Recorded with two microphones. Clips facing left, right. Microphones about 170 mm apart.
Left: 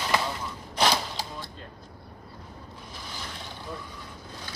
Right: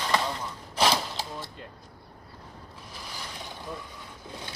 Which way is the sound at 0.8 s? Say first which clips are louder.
Even; centre (ahead or behind).